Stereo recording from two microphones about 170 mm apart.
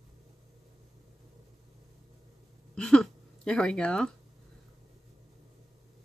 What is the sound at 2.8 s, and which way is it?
Speech, 5° left (ahead or behind).